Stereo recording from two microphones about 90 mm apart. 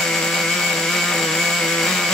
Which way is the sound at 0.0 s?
5° left (ahead or behind).